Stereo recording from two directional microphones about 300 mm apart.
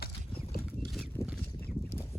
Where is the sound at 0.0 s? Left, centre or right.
Left.